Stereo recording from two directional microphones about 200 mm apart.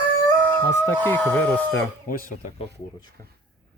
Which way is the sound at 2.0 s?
45° left (ahead or behind).